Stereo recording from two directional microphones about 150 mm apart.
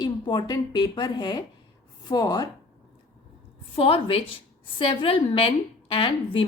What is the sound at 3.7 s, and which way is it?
A woman's voice, 35° left (ahead or behind).